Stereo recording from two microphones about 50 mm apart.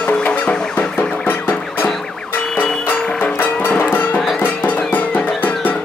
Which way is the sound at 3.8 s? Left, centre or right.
Left.